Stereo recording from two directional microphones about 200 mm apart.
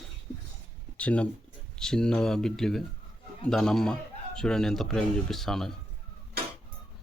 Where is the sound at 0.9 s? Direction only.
5° left (ahead or behind).